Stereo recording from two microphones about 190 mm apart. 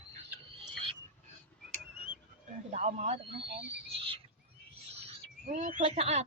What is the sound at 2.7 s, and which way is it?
Speech, 35° right (ahead or behind).